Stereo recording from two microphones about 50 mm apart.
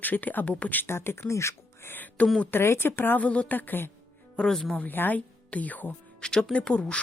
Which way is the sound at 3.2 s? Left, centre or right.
Left.